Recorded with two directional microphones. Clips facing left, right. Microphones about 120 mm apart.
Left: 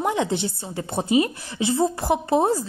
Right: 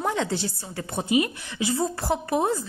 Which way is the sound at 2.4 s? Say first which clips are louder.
Left 4 dB; 35° left (ahead or behind).